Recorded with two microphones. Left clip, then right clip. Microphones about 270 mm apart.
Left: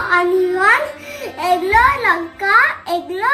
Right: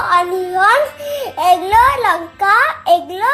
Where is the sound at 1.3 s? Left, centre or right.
Centre.